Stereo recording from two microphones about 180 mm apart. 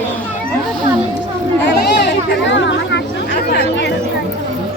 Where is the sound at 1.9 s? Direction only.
80° left.